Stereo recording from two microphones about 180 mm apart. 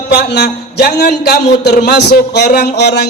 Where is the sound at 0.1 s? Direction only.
70° left (ahead or behind).